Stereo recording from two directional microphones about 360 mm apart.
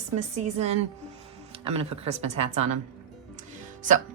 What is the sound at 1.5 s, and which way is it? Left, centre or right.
Speech, centre.